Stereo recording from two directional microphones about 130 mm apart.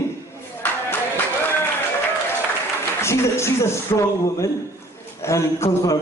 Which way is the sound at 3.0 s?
20° left (ahead or behind).